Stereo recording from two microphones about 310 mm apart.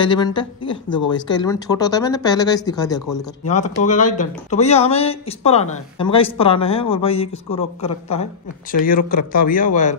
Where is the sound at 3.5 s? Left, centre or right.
Left.